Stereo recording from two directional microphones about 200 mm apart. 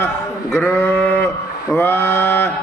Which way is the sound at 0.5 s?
10° left (ahead or behind).